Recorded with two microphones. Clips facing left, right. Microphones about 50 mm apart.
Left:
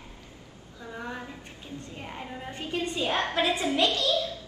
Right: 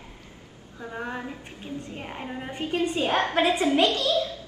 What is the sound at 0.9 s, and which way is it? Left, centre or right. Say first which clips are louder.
A woman's voice: right 4 dB; right.